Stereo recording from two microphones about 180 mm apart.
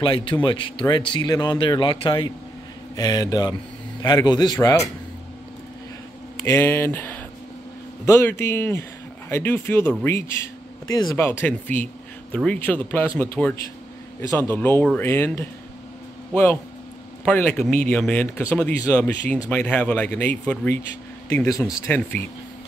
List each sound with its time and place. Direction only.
0.0 s a man's voice: 30° left (ahead or behind)
6.4 s speech: 15° left (ahead or behind)
17.2 s speech: 5° left (ahead or behind)